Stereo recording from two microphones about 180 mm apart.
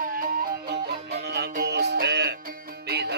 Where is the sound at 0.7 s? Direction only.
65° right (ahead or behind).